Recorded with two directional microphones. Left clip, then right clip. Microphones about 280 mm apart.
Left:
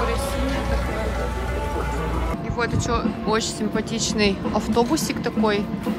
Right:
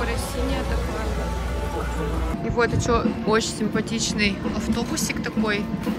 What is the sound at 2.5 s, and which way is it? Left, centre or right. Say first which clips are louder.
Speech: right 3 dB; centre.